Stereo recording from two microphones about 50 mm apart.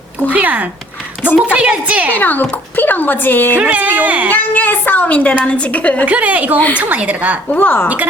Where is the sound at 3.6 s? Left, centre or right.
Right.